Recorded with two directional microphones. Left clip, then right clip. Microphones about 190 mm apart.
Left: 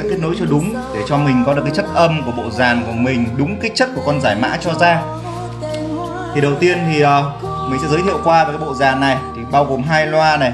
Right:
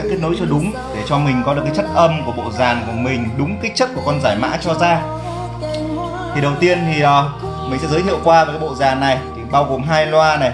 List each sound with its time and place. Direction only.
0.2 s a man's voice: 15° left (ahead or behind)
6.3 s a man's voice: 10° left (ahead or behind)